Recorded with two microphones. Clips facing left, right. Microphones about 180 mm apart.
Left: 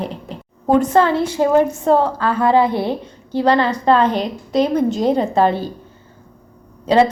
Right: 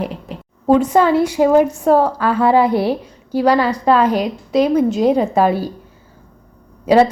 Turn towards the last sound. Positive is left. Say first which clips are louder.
# right 2 dB
turn(degrees=-10)  # may be behind; listen again after turning